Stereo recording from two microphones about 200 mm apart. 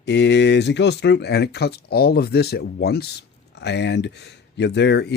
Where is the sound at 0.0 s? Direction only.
60° left (ahead or behind).